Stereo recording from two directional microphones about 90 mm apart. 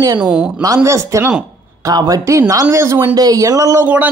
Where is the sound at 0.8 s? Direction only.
30° right (ahead or behind).